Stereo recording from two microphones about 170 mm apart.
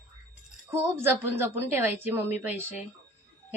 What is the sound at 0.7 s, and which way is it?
A woman's voice, 15° right (ahead or behind).